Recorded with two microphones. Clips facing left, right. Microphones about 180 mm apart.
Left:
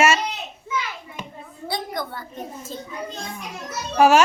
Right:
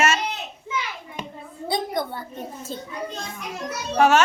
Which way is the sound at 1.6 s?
25° right (ahead or behind).